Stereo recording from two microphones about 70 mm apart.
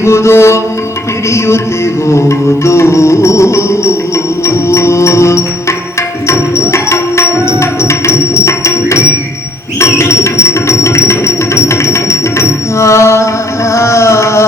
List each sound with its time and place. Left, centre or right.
0.0 s music: left
2.6 s music: left
9.8 s a sound: left